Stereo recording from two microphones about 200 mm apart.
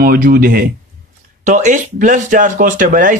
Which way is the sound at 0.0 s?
45° right (ahead or behind).